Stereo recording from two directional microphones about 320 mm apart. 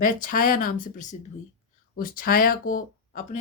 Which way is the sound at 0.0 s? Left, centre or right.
Left.